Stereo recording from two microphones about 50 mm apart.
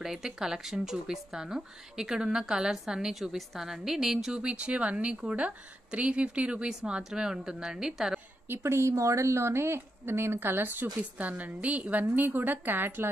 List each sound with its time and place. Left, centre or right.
0.0 s a woman's voice: centre
6.7 s speech: centre
8.5 s a woman's voice: right
11.0 s a woman's voice: right